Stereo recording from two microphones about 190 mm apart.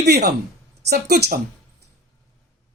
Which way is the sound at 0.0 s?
60° right (ahead or behind).